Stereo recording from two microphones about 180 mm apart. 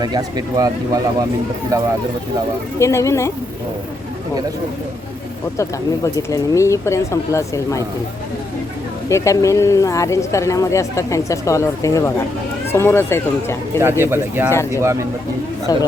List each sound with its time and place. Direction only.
0.0 s speech: 20° right (ahead or behind)
1.7 s speech: 20° right (ahead or behind)
2.7 s speech: 15° left (ahead or behind)
5.5 s speech: 20° left (ahead or behind)
9.0 s speech: 15° left (ahead or behind)
13.7 s speech: 15° right (ahead or behind)
14.5 s speech: 15° left (ahead or behind)
14.8 s speech: 15° right (ahead or behind)
15.7 s speech: 20° left (ahead or behind)